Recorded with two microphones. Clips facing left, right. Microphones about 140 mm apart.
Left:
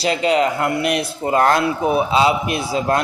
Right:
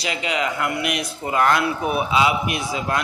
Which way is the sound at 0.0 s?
35° left (ahead or behind).